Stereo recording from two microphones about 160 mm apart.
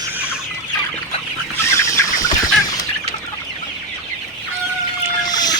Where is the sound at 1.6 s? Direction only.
20° left (ahead or behind).